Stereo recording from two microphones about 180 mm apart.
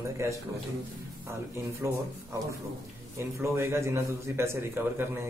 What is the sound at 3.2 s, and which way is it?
A man's voice, 15° right (ahead or behind).